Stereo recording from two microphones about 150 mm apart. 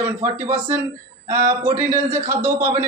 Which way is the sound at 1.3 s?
15° right (ahead or behind).